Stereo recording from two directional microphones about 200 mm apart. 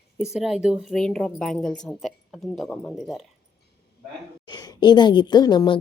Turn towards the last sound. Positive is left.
turn(degrees=20)  # may be behind; listen again after turning